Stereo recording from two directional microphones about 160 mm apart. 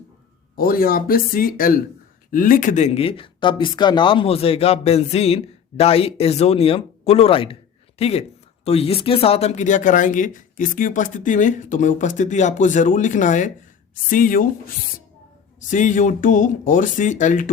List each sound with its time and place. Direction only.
0.5 s speech: 65° left (ahead or behind)
15.7 s speech: 50° left (ahead or behind)